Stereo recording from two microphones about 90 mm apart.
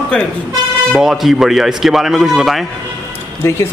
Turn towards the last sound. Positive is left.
turn(degrees=30)  # may be behind; listen again after turning